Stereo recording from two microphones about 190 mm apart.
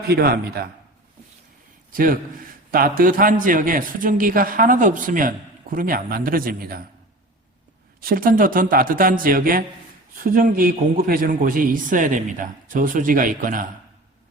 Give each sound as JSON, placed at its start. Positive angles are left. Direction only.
{"t": 0.1, "sound": "a man's voice", "side_deg": -55}
{"t": 1.9, "sound": "a man's voice", "side_deg": -45}
{"t": 8.0, "sound": "a man's voice", "side_deg": -50}